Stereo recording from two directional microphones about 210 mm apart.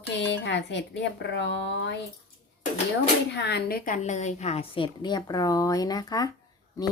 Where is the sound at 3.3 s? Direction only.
55° left (ahead or behind).